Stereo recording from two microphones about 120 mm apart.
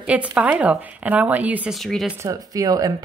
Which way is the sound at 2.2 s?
25° right (ahead or behind).